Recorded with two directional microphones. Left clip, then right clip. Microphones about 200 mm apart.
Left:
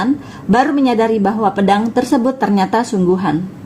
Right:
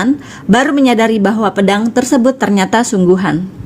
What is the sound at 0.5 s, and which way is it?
Speech, 45° right (ahead or behind).